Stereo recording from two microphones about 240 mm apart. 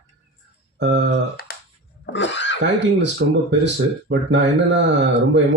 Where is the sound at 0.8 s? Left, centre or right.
Right.